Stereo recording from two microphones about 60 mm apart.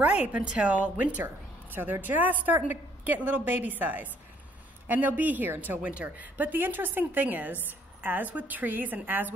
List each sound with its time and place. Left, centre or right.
0.0 s speech: centre
1.2 s a woman's voice: right